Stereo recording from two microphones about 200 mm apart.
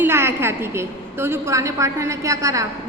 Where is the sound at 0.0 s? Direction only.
10° right (ahead or behind).